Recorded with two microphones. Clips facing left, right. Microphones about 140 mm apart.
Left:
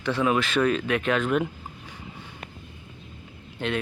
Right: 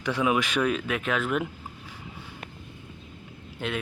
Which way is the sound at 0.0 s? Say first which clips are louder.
Left 1 dB; 10° right (ahead or behind).